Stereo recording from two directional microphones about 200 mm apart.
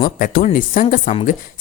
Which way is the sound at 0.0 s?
45° left (ahead or behind).